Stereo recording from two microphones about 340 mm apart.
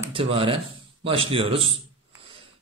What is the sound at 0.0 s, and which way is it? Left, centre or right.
Speech, centre.